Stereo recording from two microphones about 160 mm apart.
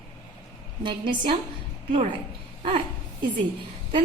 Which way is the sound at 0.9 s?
30° right (ahead or behind).